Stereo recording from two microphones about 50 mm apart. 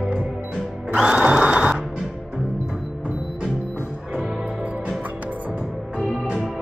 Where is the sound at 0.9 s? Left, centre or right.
Centre.